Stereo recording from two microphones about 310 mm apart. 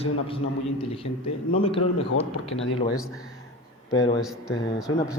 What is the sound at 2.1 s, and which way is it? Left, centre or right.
Speech, left.